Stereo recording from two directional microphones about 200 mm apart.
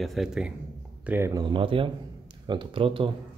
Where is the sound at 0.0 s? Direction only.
Centre (ahead or behind); by 3.1 s 25° right (ahead or behind).